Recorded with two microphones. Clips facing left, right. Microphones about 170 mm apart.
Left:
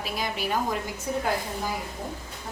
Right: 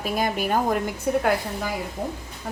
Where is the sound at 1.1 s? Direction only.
60° right (ahead or behind).